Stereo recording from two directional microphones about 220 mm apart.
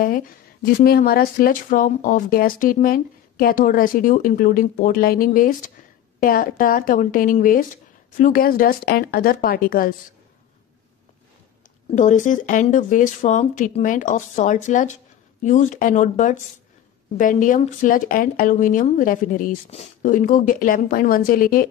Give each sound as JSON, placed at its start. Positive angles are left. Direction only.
{"t": 0.0, "sound": "speech", "side_deg": 40}
{"t": 11.9, "sound": "speech", "side_deg": 35}